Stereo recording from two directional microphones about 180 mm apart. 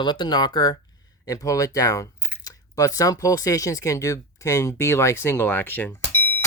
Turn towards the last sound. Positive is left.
turn(degrees=10)  # may be behind; listen again after turning